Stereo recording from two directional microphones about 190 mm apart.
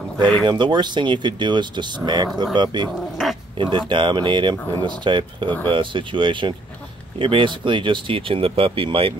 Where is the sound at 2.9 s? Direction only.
Centre (ahead or behind).